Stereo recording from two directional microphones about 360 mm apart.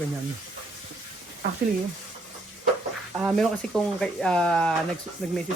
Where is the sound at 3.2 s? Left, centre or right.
Centre.